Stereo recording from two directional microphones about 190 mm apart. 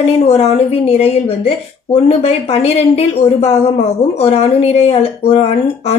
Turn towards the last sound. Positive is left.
turn(degrees=30)  # may be behind; listen again after turning